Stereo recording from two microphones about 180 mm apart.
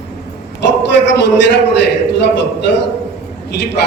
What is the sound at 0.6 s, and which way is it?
A man's voice, 70° left (ahead or behind).